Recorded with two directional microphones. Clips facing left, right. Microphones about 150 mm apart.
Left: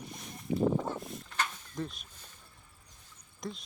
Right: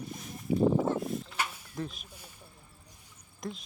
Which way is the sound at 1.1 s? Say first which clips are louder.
Right 2 dB; 10° right (ahead or behind).